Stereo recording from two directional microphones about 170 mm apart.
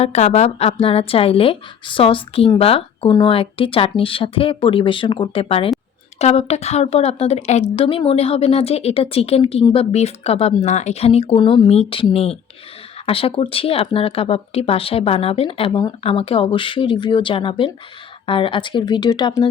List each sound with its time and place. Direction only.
0.0 s speech: 40° left (ahead or behind)